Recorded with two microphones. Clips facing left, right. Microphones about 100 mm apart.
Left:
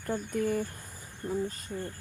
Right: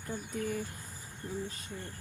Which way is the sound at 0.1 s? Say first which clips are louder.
Left 6 dB; 55° left (ahead or behind).